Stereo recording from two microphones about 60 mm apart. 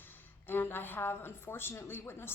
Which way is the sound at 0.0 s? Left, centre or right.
Left.